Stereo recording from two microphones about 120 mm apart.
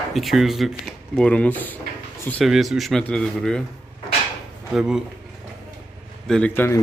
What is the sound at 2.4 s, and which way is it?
Speech, centre (ahead or behind).